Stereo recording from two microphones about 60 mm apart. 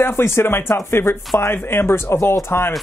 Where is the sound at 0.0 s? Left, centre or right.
Left.